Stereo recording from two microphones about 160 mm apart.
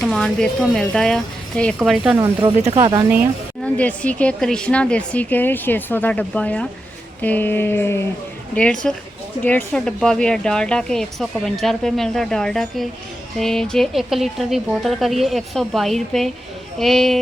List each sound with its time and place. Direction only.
0.0 s speech: 5° left (ahead or behind)
2.1 s speech: 15° right (ahead or behind)
3.6 s speech: 10° left (ahead or behind)